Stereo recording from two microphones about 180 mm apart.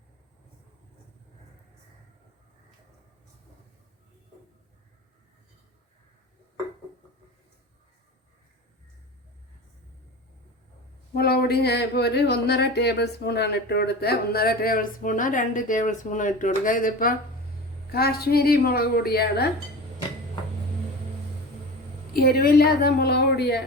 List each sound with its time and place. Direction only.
11.1 s speech: 60° left (ahead or behind)
22.1 s speech: 55° left (ahead or behind)